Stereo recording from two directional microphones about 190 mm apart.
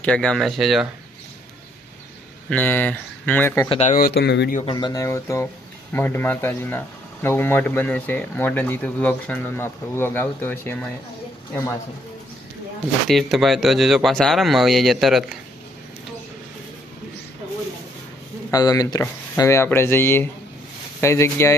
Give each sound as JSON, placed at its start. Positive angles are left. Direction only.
{"t": 0.0, "sound": "speech", "side_deg": 5}
{"t": 2.5, "sound": "speech", "side_deg": 10}
{"t": 3.7, "sound": "speech", "side_deg": 35}
{"t": 3.9, "sound": "speech", "side_deg": 55}
{"t": 4.6, "sound": "speech", "side_deg": 25}
{"t": 13.1, "sound": "speech", "side_deg": 0}
{"t": 18.5, "sound": "speech", "side_deg": 20}